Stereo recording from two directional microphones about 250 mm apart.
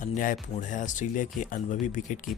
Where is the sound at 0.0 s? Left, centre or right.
Left.